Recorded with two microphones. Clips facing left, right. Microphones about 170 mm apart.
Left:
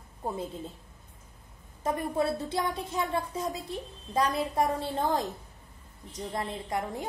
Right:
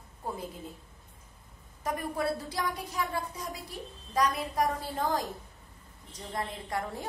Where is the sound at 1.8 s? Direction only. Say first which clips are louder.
Left 3 dB; 25° left (ahead or behind).